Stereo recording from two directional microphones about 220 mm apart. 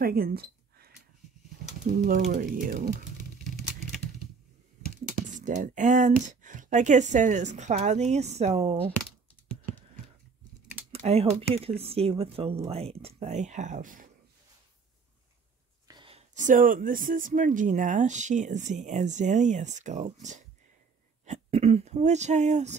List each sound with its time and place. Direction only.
0.0 s a sound: 45° right (ahead or behind)
1.9 s speech: 45° right (ahead or behind)
3.4 s a sound: centre (ahead or behind)
5.0 s speech: 35° right (ahead or behind)
10.9 s speech: 25° right (ahead or behind)
15.9 s speech: 25° right (ahead or behind)